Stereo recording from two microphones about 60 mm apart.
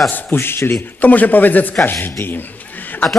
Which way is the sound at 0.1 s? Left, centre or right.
Left.